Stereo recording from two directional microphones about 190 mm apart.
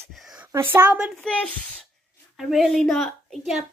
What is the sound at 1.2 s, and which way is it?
A woman's voice, 5° left (ahead or behind).